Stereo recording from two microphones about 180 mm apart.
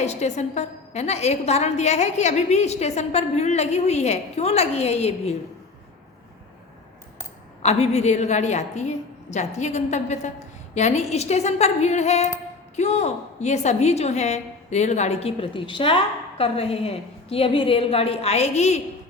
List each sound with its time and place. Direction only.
0.0 s a woman's voice: 40° left (ahead or behind)
7.6 s a woman's voice: 35° left (ahead or behind)